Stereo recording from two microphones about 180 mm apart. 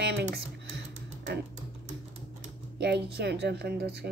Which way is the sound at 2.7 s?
65° right (ahead or behind).